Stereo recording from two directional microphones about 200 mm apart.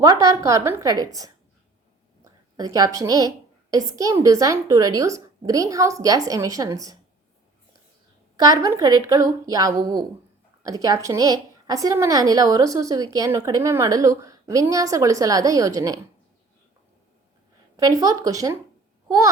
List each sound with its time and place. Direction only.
0.0 s a woman's voice: 15° right (ahead or behind)
8.4 s a woman's voice: 15° right (ahead or behind)
17.7 s a woman's voice: 15° right (ahead or behind)